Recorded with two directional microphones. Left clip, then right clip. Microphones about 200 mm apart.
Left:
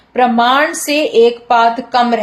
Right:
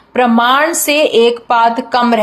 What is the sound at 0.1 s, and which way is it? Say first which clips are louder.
A woman's voice: even; 25° right (ahead or behind).